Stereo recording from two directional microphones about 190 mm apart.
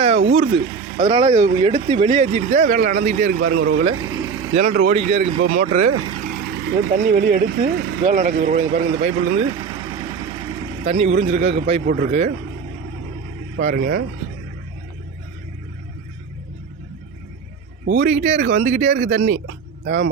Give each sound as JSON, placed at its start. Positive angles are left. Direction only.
{"t": 0.0, "sound": "vehicle", "side_deg": -30}
{"t": 0.3, "sound": "speech", "side_deg": -30}
{"t": 0.6, "sound": "speech", "side_deg": -15}
{"t": 2.1, "sound": "speech", "side_deg": -35}
{"t": 3.6, "sound": "speech", "side_deg": -90}
{"t": 4.0, "sound": "vehicle", "side_deg": -20}
{"t": 4.9, "sound": "speech", "side_deg": -35}
{"t": 5.7, "sound": "speech", "side_deg": -35}
{"t": 6.2, "sound": "speech", "side_deg": -65}
{"t": 8.1, "sound": "speech", "side_deg": -50}
{"t": 9.5, "sound": "vehicle", "side_deg": -15}
{"t": 10.8, "sound": "speech", "side_deg": -35}
{"t": 13.7, "sound": "speech", "side_deg": -50}
{"t": 18.0, "sound": "speech", "side_deg": -35}